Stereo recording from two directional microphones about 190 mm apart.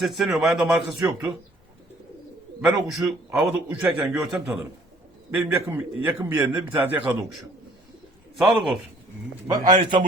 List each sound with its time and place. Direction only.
0.0 s a man's voice: centre (ahead or behind)
2.6 s a man's voice: 5° right (ahead or behind)
8.4 s a man's voice: centre (ahead or behind)
9.5 s a man's voice: 20° right (ahead or behind)